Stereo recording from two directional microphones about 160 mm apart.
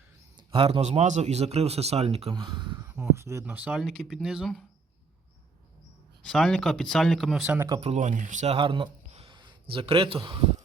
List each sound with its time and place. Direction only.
0.3 s speech: 35° right (ahead or behind)
2.3 s speech: 30° right (ahead or behind)
2.8 s a sound: 10° right (ahead or behind)
3.2 s speech: 15° right (ahead or behind); by 4.6 s centre (ahead or behind)
6.2 s speech: 5° left (ahead or behind)
7.4 s speech: 10° right (ahead or behind)
7.8 s speech: 45° right (ahead or behind)
8.5 s speech: 35° right (ahead or behind)